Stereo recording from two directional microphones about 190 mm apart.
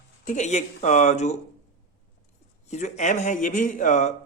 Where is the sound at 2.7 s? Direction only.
40° left (ahead or behind).